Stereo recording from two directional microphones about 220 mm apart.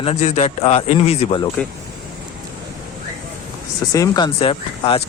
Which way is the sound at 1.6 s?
5° left (ahead or behind).